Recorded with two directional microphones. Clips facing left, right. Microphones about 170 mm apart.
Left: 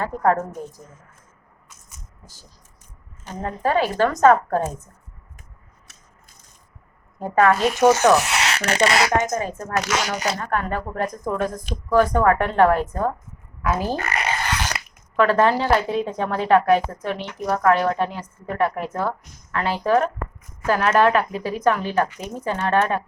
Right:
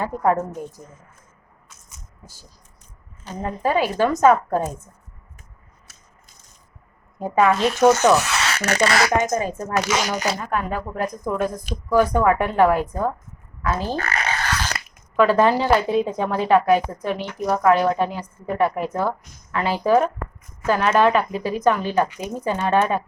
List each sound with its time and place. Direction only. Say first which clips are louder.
0.0 s speech: even; 10° right (ahead or behind)
3.4 s speech: even; 10° right (ahead or behind)
7.5 s speech: even; 10° left (ahead or behind)
9.2 s a woman's voice: right 2 dB; 10° right (ahead or behind)
13.6 s a sound: left 1 dB; 10° left (ahead or behind)
15.1 s a woman's voice: right 1 dB; 5° right (ahead or behind)